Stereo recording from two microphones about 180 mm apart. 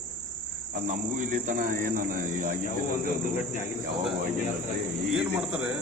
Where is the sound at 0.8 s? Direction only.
45° right (ahead or behind).